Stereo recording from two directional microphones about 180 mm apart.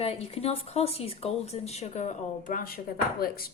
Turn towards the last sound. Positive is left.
turn(degrees=55)  # may be behind; listen again after turning